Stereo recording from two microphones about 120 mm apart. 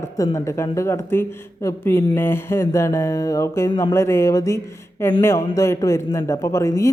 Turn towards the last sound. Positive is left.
turn(degrees=25)  # may be behind; listen again after turning